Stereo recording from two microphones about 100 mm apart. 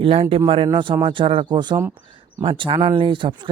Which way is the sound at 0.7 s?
55° right (ahead or behind).